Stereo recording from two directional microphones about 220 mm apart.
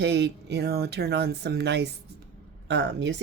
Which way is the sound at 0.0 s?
50° right (ahead or behind).